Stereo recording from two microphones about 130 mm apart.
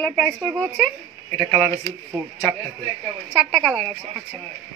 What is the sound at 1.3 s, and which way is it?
Speech, 20° left (ahead or behind).